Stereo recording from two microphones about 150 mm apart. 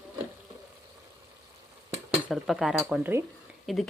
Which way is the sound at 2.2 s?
Centre (ahead or behind).